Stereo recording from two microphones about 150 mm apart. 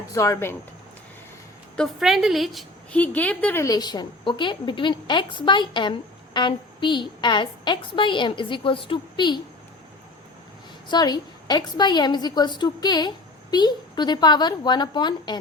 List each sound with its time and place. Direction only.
0.1 s a woman's voice: 20° left (ahead or behind)
1.7 s a woman's voice: centre (ahead or behind)
3.0 s a woman's voice: 10° left (ahead or behind); by 9.4 s 30° left (ahead or behind)
10.8 s a woman's voice: 30° left (ahead or behind)